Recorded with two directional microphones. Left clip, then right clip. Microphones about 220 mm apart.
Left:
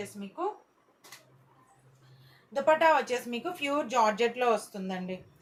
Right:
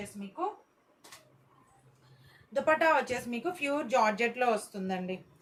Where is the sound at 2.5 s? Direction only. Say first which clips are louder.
Left 2 dB; 15° right (ahead or behind).